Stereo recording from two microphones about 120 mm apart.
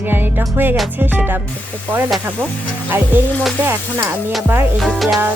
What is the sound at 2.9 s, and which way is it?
Music, 20° right (ahead or behind).